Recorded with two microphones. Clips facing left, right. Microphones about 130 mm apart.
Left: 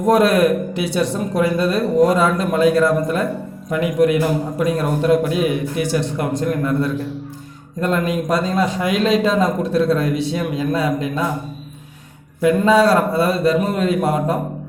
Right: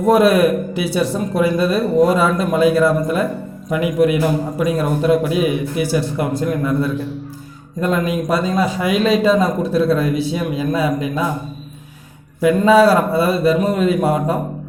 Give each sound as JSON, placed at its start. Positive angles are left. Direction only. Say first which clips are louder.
{"t": 0.0, "sound": "a man's voice", "louder": "right 2 dB", "side_deg": -5}
{"t": 12.4, "sound": "a man's voice", "louder": "right 2 dB", "side_deg": -5}